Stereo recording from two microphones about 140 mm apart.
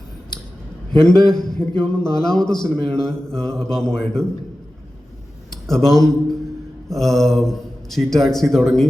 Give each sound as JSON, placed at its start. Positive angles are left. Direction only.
{"t": 1.0, "sound": "a man's voice", "side_deg": 5}
{"t": 5.5, "sound": "a sound", "side_deg": 5}
{"t": 6.9, "sound": "a man's voice", "side_deg": 0}